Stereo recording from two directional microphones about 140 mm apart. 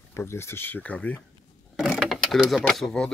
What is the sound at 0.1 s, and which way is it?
Speech, 20° left (ahead or behind).